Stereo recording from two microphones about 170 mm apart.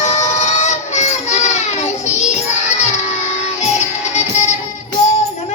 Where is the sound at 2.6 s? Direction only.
40° left (ahead or behind).